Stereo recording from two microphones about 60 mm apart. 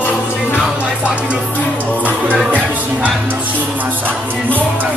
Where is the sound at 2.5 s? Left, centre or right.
Right.